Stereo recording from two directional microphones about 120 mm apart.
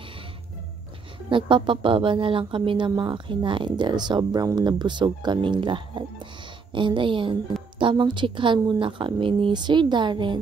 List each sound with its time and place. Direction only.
1.3 s a woman's voice: 45° right (ahead or behind)